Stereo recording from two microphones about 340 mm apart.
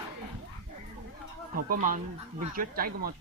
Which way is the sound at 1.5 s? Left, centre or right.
Right.